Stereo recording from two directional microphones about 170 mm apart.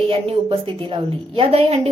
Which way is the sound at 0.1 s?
35° right (ahead or behind).